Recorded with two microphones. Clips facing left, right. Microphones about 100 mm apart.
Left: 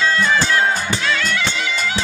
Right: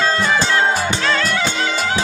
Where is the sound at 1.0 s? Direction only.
35° right (ahead or behind).